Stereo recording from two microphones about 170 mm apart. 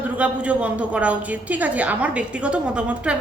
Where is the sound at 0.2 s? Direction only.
10° right (ahead or behind).